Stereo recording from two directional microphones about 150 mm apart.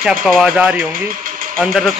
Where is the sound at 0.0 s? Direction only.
Centre (ahead or behind).